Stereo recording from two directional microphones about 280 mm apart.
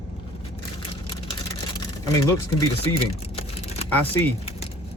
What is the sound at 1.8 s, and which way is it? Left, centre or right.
Speech, centre.